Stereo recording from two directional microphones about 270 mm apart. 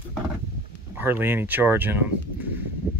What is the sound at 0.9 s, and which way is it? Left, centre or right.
Speech, centre.